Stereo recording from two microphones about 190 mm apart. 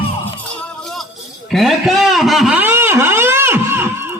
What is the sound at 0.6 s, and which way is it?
Music, centre (ahead or behind).